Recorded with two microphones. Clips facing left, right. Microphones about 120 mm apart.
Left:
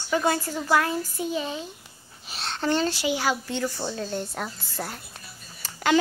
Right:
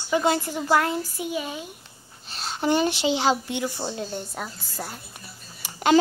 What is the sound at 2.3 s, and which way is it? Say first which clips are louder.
Speech: even; centre (ahead or behind).